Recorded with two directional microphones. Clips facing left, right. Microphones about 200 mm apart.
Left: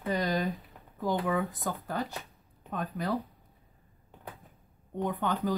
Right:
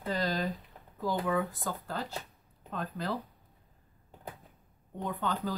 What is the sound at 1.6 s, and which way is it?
Speech, 15° left (ahead or behind).